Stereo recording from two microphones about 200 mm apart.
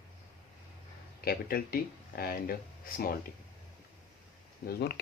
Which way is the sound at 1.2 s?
50° left (ahead or behind).